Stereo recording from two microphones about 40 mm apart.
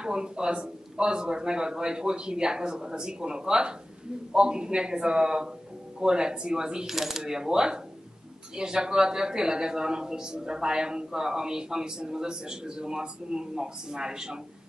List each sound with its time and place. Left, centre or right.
0.0 s a man's voice: right
7.0 s a man's voice: centre